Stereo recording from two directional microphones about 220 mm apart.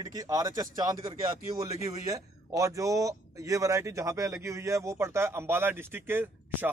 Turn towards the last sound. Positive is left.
turn(degrees=-10)  # may be behind; listen again after turning